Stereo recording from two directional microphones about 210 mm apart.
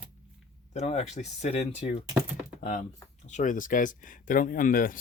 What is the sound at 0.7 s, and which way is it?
Speech, 35° left (ahead or behind).